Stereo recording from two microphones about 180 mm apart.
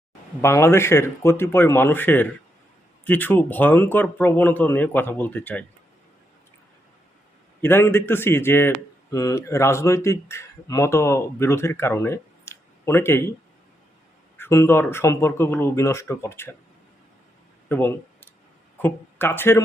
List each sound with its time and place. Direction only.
0.4 s speech: 15° left (ahead or behind)
7.6 s speech: 10° left (ahead or behind)
14.3 s speech: 15° left (ahead or behind)
17.7 s a sound: 10° left (ahead or behind)
18.8 s speech: 10° left (ahead or behind)